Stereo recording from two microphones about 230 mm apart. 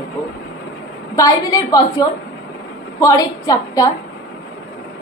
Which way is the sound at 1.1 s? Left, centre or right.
Centre.